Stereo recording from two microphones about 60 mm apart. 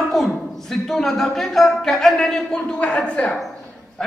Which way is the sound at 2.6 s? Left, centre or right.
Centre.